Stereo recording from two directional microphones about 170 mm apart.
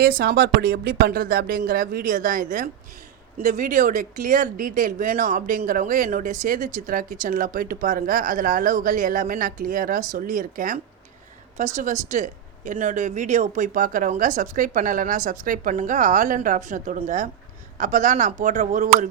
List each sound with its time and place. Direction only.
0.0 s speech: 65° right (ahead or behind); by 19.0 s 45° right (ahead or behind)